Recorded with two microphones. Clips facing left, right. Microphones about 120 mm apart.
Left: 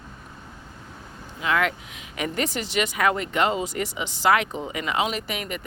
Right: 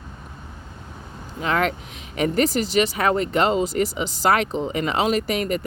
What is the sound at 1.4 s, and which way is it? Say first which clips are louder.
Speech: right 2 dB; 35° right (ahead or behind).